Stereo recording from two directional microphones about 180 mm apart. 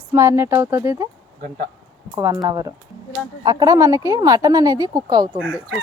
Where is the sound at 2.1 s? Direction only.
20° right (ahead or behind).